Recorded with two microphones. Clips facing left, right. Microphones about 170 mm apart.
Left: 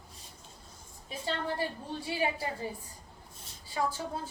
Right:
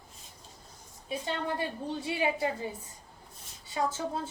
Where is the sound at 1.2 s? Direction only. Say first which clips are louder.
Left 1 dB; 20° right (ahead or behind).